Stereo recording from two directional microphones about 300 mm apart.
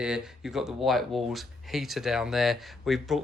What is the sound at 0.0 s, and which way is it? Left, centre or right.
Speech, centre.